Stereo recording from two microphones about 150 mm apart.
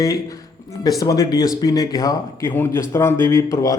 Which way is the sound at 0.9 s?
25° left (ahead or behind).